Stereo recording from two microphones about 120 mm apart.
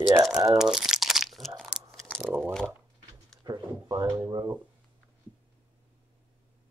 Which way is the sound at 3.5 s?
35° right (ahead or behind).